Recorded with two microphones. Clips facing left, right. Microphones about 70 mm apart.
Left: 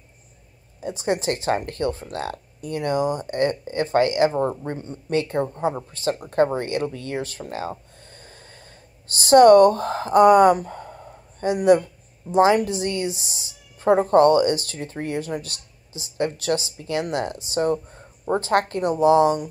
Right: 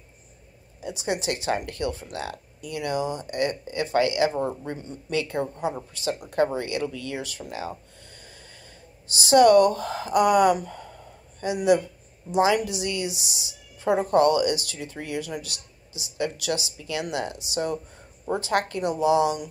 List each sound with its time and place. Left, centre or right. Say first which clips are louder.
0.7 s a woman's voice: left 4 dB; left
9.1 s a woman's voice: left 4 dB; left